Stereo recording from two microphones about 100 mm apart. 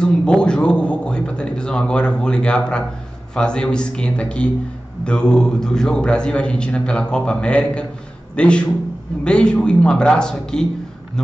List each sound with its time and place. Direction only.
0.0 s a man's voice: 10° left (ahead or behind)